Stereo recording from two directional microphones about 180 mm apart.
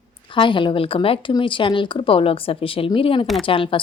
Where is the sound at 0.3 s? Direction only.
25° left (ahead or behind).